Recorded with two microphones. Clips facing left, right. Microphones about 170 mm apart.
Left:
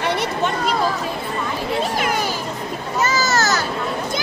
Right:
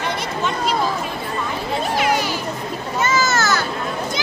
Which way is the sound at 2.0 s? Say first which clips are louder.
Right 2 dB; 50° left (ahead or behind).